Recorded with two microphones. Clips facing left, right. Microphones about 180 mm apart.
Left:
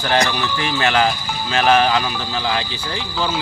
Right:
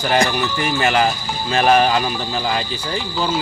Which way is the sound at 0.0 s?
10° right (ahead or behind).